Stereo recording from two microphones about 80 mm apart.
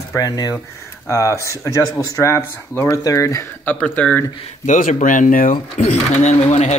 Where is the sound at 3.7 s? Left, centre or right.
Centre.